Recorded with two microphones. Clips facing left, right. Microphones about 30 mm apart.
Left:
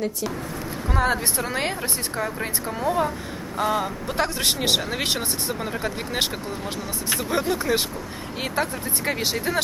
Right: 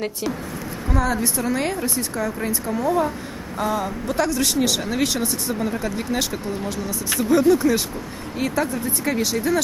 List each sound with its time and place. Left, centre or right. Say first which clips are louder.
0.9 s speech: right 1 dB; left
4.2 s speech: right 3 dB; left
6.1 s speech: right 1 dB; left